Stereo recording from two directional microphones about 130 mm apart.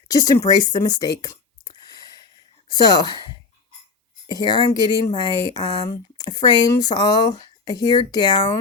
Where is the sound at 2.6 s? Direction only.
30° left (ahead or behind).